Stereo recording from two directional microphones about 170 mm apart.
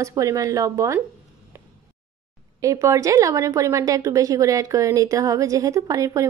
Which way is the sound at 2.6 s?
20° right (ahead or behind).